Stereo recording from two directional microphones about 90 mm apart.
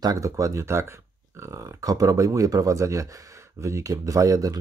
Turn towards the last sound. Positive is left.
turn(degrees=-40)  # may be behind; listen again after turning